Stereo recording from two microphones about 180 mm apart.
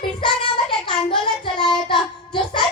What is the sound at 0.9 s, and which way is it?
Child singing, 25° left (ahead or behind).